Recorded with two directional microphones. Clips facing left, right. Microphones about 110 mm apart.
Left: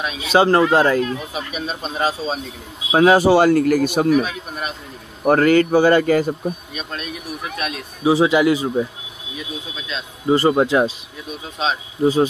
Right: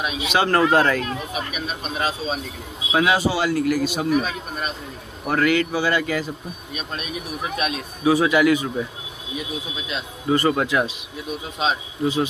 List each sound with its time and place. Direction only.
0.3 s speech: 25° left (ahead or behind)
3.2 s speech: 50° left (ahead or behind)
5.2 s speech: 40° left (ahead or behind)
7.5 s a man's voice: 20° right (ahead or behind)
8.0 s speech: 25° left (ahead or behind)
10.2 s speech: 25° left (ahead or behind)
12.0 s speech: 35° left (ahead or behind)